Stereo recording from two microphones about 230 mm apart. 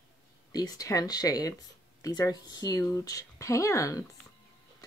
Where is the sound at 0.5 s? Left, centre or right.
Centre.